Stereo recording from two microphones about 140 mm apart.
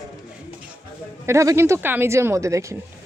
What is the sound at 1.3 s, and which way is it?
Speech, 20° right (ahead or behind).